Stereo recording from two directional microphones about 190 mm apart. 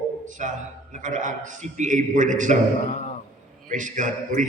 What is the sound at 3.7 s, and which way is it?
Speech, 45° right (ahead or behind).